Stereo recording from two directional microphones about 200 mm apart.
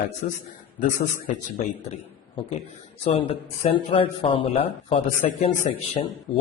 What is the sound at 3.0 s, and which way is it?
Speech, 30° left (ahead or behind).